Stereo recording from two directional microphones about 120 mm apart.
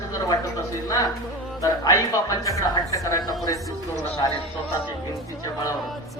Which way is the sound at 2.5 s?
25° left (ahead or behind).